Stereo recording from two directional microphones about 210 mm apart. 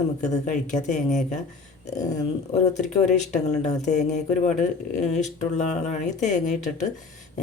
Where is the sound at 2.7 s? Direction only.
35° left (ahead or behind).